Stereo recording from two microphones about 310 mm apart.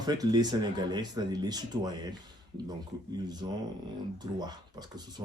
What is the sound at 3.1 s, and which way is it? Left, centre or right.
Speech, centre.